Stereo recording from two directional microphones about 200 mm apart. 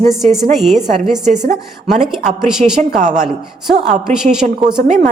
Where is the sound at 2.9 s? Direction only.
35° right (ahead or behind).